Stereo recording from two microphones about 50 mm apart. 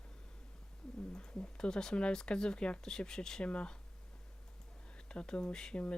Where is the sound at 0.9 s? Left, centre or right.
Left.